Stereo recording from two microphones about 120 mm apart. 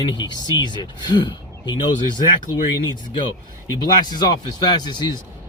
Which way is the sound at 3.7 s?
35° left (ahead or behind).